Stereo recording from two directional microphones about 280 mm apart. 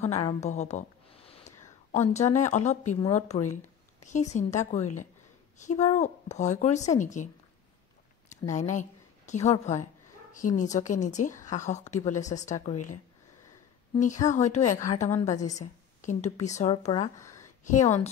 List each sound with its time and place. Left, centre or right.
0.0 s a woman's voice: left
8.5 s speech: left
13.9 s a woman's voice: left; by 17.5 s centre
17.6 s speech: left